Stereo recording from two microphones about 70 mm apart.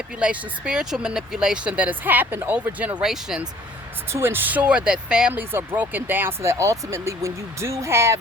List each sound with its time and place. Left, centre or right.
0.2 s speech: centre; by 2.7 s right
3.0 s speech: centre
4.1 s speech: right; by 5.3 s centre
5.3 s speech: right
6.4 s speech: right